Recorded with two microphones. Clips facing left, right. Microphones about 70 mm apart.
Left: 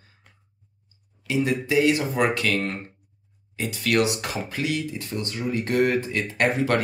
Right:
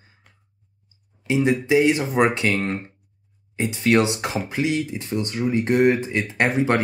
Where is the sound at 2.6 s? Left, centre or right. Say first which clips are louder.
Right 3 dB; centre.